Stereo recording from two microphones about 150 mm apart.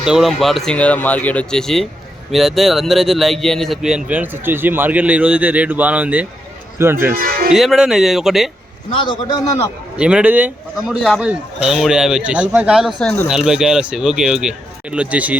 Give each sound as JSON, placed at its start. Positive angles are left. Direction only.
{"t": 0.0, "sound": "speech", "side_deg": 0}
{"t": 7.2, "sound": "speech", "side_deg": -70}
{"t": 7.5, "sound": "speech", "side_deg": 0}
{"t": 8.9, "sound": "a man's voice", "side_deg": 30}
{"t": 10.0, "sound": "speech", "side_deg": -5}
{"t": 10.9, "sound": "speech", "side_deg": 0}